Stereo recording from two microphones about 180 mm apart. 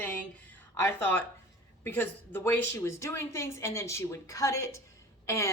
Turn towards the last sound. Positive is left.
turn(degrees=15)  # may be behind; listen again after turning